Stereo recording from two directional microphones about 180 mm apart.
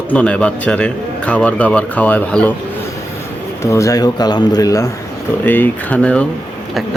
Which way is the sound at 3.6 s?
15° left (ahead or behind).